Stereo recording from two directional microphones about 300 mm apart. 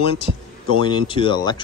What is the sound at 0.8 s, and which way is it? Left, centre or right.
Speech, centre.